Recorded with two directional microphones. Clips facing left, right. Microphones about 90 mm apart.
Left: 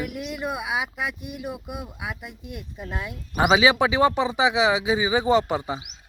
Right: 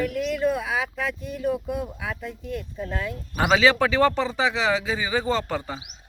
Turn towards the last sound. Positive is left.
turn(degrees=15)  # may be behind; listen again after turning